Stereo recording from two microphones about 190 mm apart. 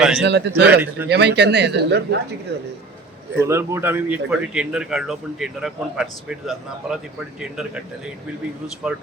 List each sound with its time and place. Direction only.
0.2 s speech: 70° right (ahead or behind)
0.7 s speech: 10° right (ahead or behind)
1.1 s speech: 65° right (ahead or behind)
3.4 s speech: 15° right (ahead or behind)